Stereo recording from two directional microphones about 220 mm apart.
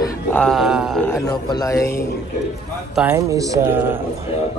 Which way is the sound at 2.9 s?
10° right (ahead or behind).